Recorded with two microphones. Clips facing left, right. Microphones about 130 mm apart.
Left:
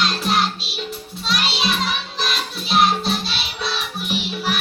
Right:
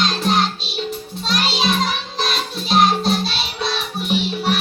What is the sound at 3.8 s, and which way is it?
Music, 35° right (ahead or behind).